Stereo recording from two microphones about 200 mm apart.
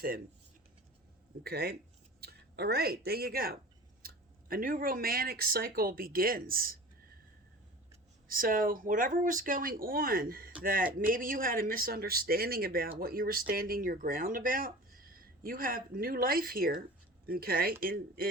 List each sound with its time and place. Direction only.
1.5 s speech: 50° right (ahead or behind)
8.3 s speech: 45° right (ahead or behind)